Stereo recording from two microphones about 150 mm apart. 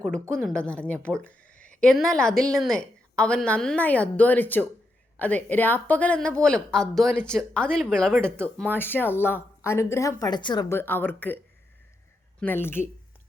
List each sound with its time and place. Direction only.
0.0 s speech: 5° left (ahead or behind); by 10.7 s 30° left (ahead or behind)
10.7 s speech: 15° left (ahead or behind)
12.4 s speech: 15° left (ahead or behind)